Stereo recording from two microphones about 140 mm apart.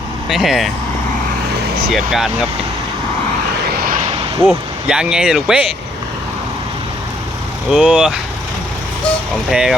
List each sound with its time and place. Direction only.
0.3 s speech: centre (ahead or behind)
1.9 s speech: centre (ahead or behind)
3.7 s vehicle: 85° right
4.4 s speech: 5° right (ahead or behind)
7.7 s speech: 5° right (ahead or behind)
9.5 s speech: 5° right (ahead or behind)